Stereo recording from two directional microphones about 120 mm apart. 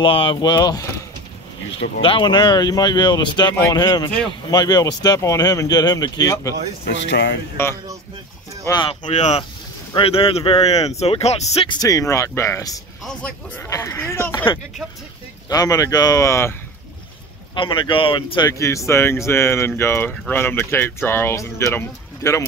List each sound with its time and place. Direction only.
0.0 s speech: 50° left (ahead or behind)
1.8 s speech: 50° left (ahead or behind); by 6.5 s 25° left (ahead or behind)
7.6 s speech: 20° left (ahead or behind)
9.1 s speech: 70° left (ahead or behind)
9.9 s speech: 50° left (ahead or behind)
11.8 s speech: 25° left (ahead or behind)
13.0 s speech: 5° left (ahead or behind)
13.6 s speech: 25° left (ahead or behind)
15.4 s speech: 30° left (ahead or behind)
17.6 s speech: 45° left (ahead or behind)
18.5 s speech: 25° left (ahead or behind)